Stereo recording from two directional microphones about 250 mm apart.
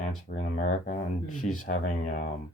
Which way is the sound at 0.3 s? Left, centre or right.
Left.